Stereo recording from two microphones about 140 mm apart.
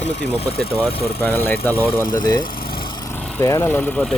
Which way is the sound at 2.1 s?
25° left (ahead or behind).